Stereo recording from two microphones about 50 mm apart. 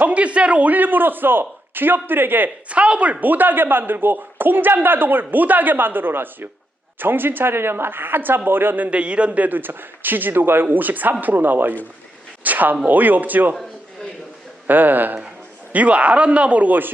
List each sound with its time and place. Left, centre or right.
0.0 s speech: right
2.6 s a woman's voice: right
9.0 s speech: right
12.4 s a sound: right
12.9 s speech: right
14.7 s speech: right